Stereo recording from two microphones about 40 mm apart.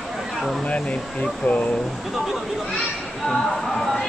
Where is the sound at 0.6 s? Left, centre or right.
Left.